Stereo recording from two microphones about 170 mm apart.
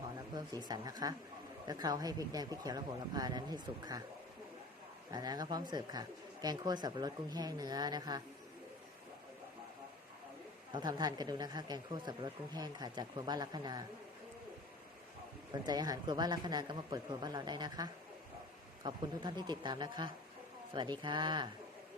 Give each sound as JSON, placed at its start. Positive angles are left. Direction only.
{"t": 0.3, "sound": "speech", "side_deg": -25}
{"t": 5.1, "sound": "speech", "side_deg": -25}
{"t": 10.7, "sound": "speech", "side_deg": -25}
{"t": 15.5, "sound": "speech", "side_deg": -25}